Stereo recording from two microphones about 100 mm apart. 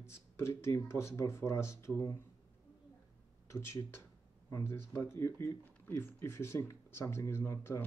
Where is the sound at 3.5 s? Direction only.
30° left (ahead or behind).